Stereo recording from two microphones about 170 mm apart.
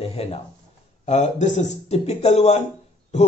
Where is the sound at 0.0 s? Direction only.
35° left (ahead or behind).